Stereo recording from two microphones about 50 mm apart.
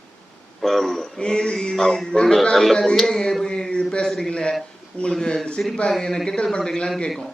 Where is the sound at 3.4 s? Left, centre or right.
Centre.